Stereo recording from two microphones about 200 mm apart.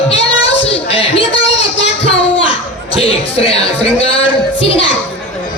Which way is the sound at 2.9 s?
30° left (ahead or behind).